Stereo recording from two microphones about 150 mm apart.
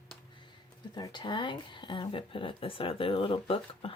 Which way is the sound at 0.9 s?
30° left (ahead or behind).